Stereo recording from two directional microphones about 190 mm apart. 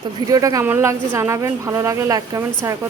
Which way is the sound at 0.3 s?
20° right (ahead or behind).